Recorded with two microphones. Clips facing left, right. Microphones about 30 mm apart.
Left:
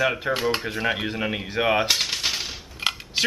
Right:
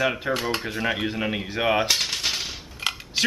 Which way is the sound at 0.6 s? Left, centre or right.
Centre.